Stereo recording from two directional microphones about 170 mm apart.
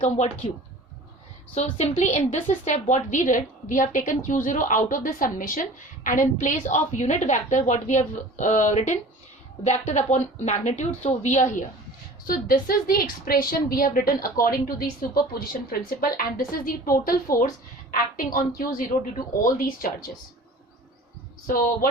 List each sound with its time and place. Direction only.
0.0 s a woman's voice: 40° left (ahead or behind)
1.6 s a woman's voice: 40° left (ahead or behind)
12.2 s a woman's voice: 55° left (ahead or behind)